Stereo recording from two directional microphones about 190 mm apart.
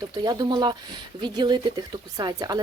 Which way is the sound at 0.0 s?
20° right (ahead or behind).